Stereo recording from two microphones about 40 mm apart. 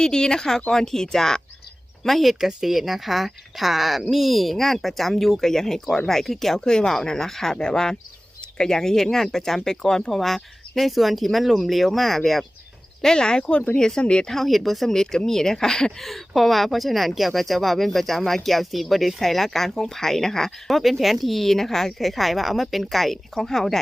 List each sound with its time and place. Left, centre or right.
0.0 s speech: centre
2.4 s speech: centre
13.0 s speech: centre
14.3 s speech: centre
14.8 s speech: centre
16.0 s speech: centre